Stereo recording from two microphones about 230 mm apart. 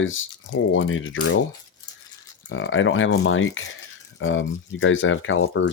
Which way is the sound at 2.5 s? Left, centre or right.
Left.